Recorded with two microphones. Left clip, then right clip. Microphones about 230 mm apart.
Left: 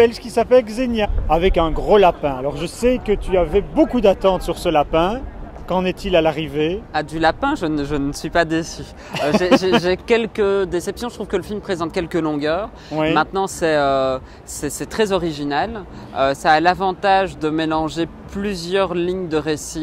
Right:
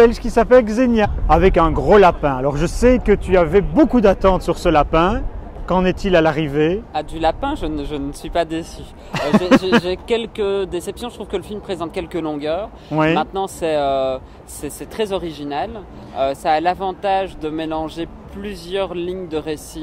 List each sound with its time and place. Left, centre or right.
0.0 s speech: right
6.9 s speech: centre
9.1 s speech: right
9.8 s speech: left